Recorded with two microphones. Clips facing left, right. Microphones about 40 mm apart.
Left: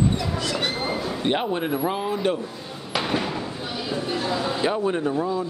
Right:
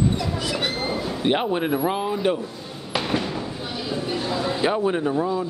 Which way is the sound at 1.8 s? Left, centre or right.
Centre.